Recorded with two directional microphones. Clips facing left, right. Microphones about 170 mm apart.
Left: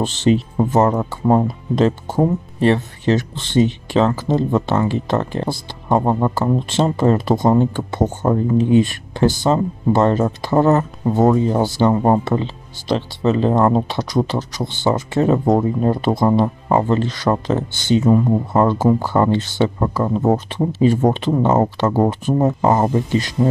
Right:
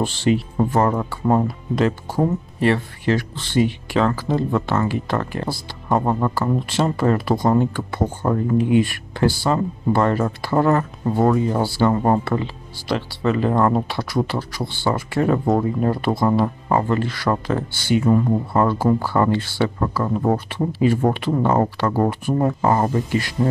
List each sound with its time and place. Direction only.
0.0 s speech: 20° left (ahead or behind)